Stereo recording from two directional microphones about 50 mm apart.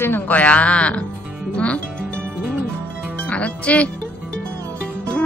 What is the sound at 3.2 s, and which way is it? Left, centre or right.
Music, left.